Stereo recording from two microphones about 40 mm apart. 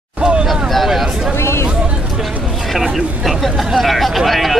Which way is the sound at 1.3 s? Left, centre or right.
Left.